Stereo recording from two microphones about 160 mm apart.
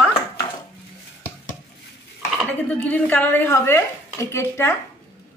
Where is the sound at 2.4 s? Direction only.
10° left (ahead or behind).